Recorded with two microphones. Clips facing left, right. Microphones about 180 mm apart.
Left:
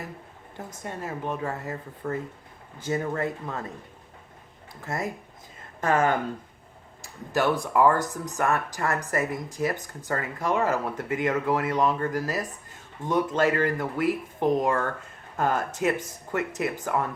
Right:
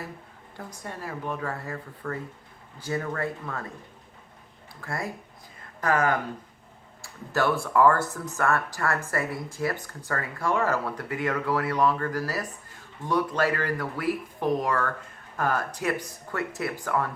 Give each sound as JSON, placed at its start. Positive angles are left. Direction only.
{"t": 0.5, "sound": "speech", "side_deg": 20}
{"t": 4.8, "sound": "speech", "side_deg": 20}